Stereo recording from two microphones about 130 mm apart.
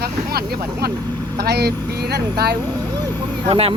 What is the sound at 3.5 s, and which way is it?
Speech, 45° right (ahead or behind).